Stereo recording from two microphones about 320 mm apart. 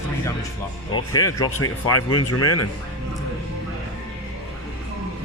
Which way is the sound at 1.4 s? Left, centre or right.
Left.